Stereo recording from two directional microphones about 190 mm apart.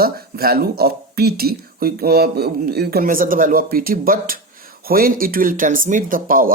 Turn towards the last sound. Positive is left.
turn(degrees=-50)  # may be behind; listen again after turning